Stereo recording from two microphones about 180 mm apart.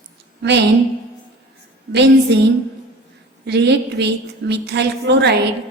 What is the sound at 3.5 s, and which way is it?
A woman's voice, 70° right (ahead or behind).